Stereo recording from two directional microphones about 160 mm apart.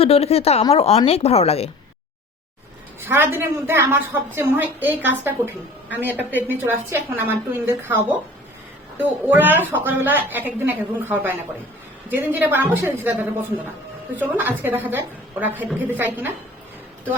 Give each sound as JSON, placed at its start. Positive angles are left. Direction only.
{"t": 0.0, "sound": "speech", "side_deg": 40}
{"t": 3.0, "sound": "a woman's voice", "side_deg": -15}
{"t": 9.2, "sound": "a woman's voice", "side_deg": -10}